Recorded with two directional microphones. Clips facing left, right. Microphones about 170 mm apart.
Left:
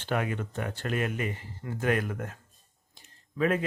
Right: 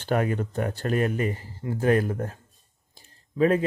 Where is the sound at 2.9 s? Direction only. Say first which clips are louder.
Right 7 dB; 35° right (ahead or behind).